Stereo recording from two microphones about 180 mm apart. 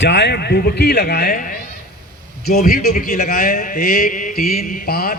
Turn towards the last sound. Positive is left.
turn(degrees=55)  # may be behind; listen again after turning